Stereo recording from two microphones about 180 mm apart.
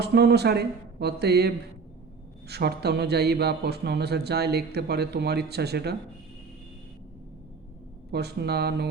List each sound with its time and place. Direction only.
0.0 s a man's voice: 70° right (ahead or behind)
8.1 s a man's voice: 65° right (ahead or behind)